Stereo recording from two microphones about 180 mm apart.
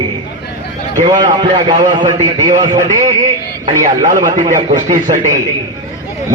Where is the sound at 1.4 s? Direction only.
25° right (ahead or behind).